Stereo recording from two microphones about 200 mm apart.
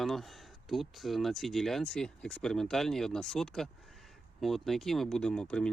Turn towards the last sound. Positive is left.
turn(degrees=5)  # may be behind; listen again after turning